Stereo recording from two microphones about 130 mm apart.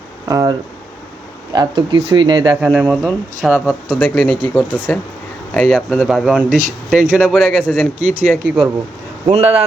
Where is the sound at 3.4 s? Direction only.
Centre (ahead or behind).